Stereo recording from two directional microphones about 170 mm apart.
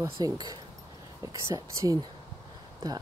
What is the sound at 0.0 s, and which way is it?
Speech, 20° right (ahead or behind).